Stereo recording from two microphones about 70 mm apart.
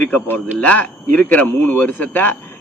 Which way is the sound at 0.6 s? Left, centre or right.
Left.